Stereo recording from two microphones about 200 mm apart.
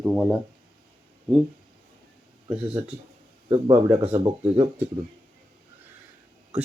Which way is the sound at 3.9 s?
10° right (ahead or behind).